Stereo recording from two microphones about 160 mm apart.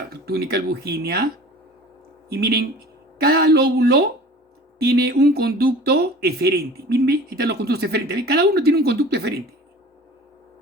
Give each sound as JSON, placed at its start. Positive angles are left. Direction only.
{"t": 0.1, "sound": "speech", "side_deg": -80}
{"t": 2.3, "sound": "speech", "side_deg": -75}